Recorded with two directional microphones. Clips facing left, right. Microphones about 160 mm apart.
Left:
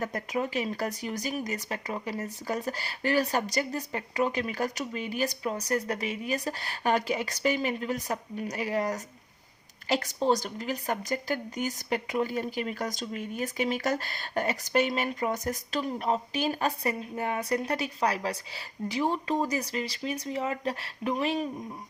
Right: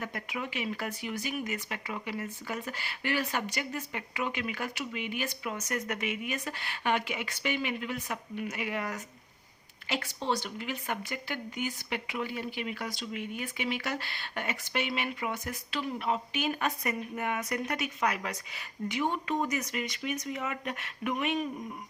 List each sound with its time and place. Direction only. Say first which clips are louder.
0.0 s speech: left 6 dB; 40° left (ahead or behind)